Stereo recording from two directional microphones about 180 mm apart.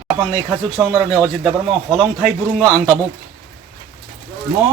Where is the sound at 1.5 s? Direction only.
5° right (ahead or behind).